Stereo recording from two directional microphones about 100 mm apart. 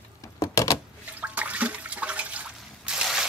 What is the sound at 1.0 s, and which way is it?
Toilet flush, 15° right (ahead or behind).